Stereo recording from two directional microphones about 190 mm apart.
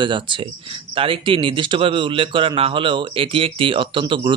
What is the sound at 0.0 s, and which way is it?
Speech, 25° right (ahead or behind).